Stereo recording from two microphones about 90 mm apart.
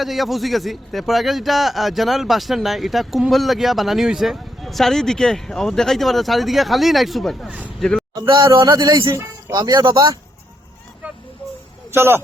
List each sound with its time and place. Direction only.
0.0 s a man's voice: centre (ahead or behind)
8.4 s speech: 35° right (ahead or behind)
8.6 s speech: 45° right (ahead or behind)
9.6 s a man's voice: 50° right (ahead or behind)
11.9 s a man's voice: 25° right (ahead or behind)